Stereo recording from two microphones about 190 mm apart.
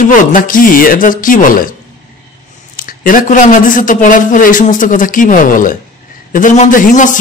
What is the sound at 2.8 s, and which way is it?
A man's voice, 45° left (ahead or behind).